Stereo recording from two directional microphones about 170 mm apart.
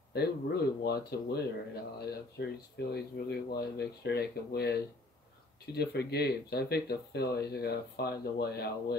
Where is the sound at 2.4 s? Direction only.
70° left (ahead or behind).